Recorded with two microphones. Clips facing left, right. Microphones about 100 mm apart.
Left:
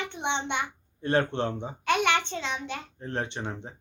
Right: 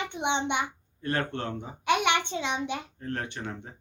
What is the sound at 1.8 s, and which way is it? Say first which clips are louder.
Speech: even; 15° right (ahead or behind).